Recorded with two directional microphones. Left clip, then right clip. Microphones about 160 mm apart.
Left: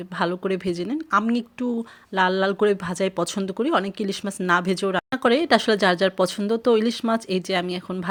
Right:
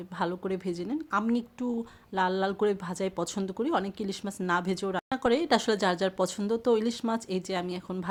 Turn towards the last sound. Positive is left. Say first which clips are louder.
# left 8 dB
turn(degrees=15)  # may be behind; listen again after turning